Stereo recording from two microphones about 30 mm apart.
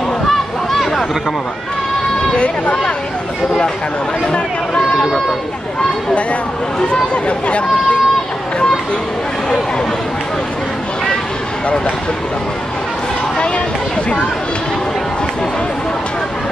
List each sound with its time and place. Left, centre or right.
6.8 s speech: left